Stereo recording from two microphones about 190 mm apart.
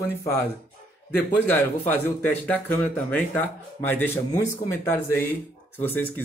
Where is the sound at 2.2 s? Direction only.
10° left (ahead or behind).